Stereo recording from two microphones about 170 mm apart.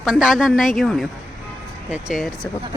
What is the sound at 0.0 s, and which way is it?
A woman's voice, centre (ahead or behind).